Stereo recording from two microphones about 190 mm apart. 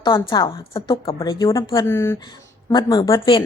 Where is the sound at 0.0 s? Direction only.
25° left (ahead or behind).